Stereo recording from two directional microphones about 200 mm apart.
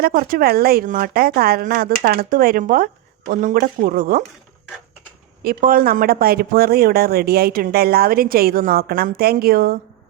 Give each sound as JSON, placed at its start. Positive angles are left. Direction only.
{"t": 0.0, "sound": "speech", "side_deg": -45}
{"t": 5.4, "sound": "speech", "side_deg": -50}